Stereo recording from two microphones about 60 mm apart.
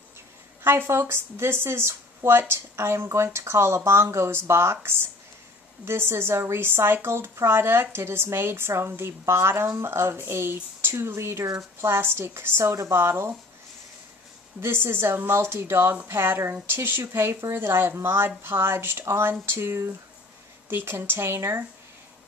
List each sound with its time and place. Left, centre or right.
0.7 s speech: right
14.6 s speech: right